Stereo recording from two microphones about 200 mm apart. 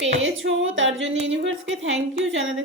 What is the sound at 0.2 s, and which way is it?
Female singing, 70° right (ahead or behind).